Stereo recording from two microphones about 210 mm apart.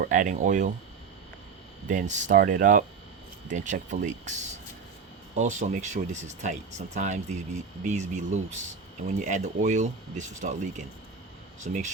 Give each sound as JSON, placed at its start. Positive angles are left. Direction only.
{"t": 0.0, "sound": "speech", "side_deg": -35}
{"t": 1.9, "sound": "speech", "side_deg": -35}